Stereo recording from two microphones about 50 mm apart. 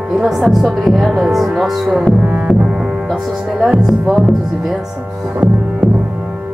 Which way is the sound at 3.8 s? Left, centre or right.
Centre.